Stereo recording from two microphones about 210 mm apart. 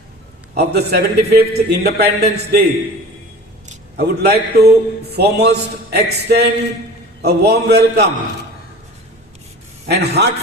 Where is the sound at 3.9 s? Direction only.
50° right (ahead or behind).